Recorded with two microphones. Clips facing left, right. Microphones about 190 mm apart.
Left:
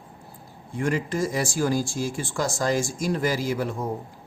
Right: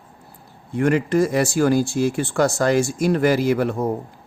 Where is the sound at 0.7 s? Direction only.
65° right (ahead or behind).